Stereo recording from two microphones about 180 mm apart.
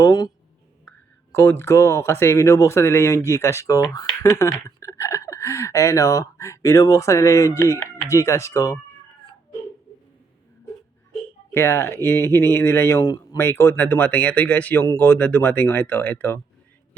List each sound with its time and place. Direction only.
0.0 s speech: 20° left (ahead or behind)
11.5 s speech: 15° left (ahead or behind)